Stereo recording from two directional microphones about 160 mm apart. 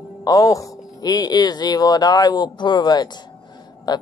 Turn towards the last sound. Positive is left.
turn(degrees=25)  # may be behind; listen again after turning